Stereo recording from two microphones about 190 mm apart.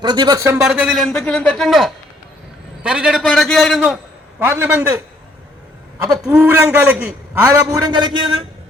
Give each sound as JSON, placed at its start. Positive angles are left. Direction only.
{"t": 0.0, "sound": "a man's voice", "side_deg": -25}
{"t": 0.6, "sound": "a man's voice", "side_deg": 0}
{"t": 6.3, "sound": "speech", "side_deg": -5}
{"t": 7.4, "sound": "a man's voice", "side_deg": -20}